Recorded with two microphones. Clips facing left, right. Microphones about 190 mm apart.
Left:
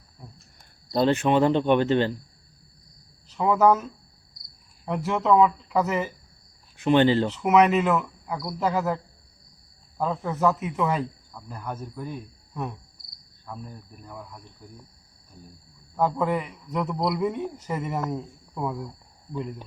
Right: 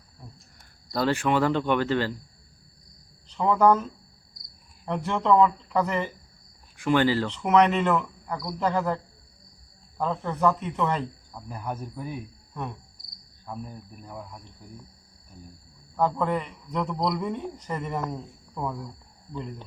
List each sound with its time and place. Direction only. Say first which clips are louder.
0.9 s speech: left 3 dB; 20° left (ahead or behind)
3.2 s speech: left 1 dB; 5° left (ahead or behind)
4.9 s speech: left 1 dB; 5° left (ahead or behind)
6.7 s speech: left 3 dB; 20° left (ahead or behind)
7.3 s speech: left 2 dB; 5° left (ahead or behind)
10.0 s speech: left 1 dB; 5° left (ahead or behind)
11.4 s speech: right 1 dB; 10° right (ahead or behind)
16.0 s a man's voice: left 1 dB; 10° left (ahead or behind)